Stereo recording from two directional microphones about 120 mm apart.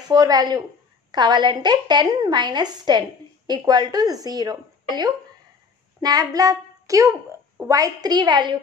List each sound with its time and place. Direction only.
0.1 s a woman's voice: 35° right (ahead or behind)